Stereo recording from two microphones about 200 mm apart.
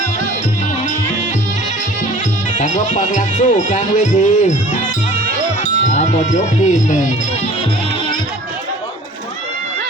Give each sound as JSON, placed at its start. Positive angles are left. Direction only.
{"t": 2.6, "sound": "speech", "side_deg": 35}
{"t": 5.8, "sound": "speech", "side_deg": 35}